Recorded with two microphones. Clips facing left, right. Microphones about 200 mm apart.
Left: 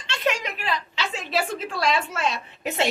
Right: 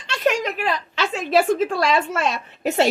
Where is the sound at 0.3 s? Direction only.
45° right (ahead or behind).